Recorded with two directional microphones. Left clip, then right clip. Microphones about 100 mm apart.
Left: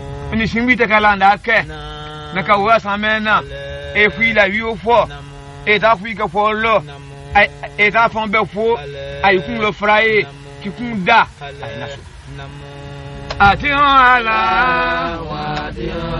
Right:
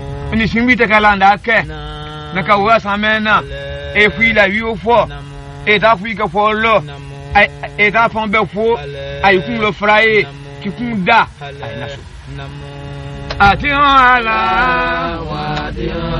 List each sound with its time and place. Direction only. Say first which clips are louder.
0.2 s a man's voice: right 3 dB; 35° left (ahead or behind)
13.3 s music: right 1 dB; 30° left (ahead or behind)